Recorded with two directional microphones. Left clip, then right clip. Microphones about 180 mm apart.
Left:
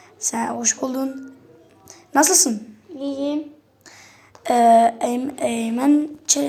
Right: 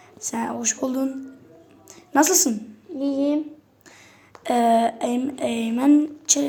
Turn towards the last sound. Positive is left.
turn(degrees=5)  # may be behind; listen again after turning